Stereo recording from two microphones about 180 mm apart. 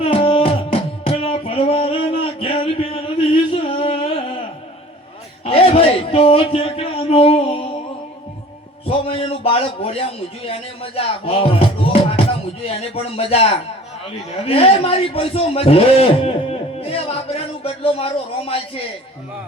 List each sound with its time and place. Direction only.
0.0 s music: 30° left (ahead or behind)
5.5 s a sound: 30° left (ahead or behind)
8.9 s a man's voice: 30° left (ahead or behind)